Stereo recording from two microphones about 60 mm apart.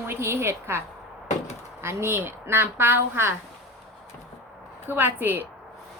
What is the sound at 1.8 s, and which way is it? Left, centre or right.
Speech, right.